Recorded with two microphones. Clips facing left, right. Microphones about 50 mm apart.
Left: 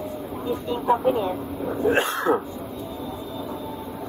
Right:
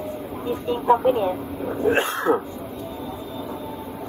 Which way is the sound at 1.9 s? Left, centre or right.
Right.